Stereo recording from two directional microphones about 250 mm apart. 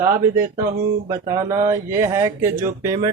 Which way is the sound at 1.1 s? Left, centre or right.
Centre.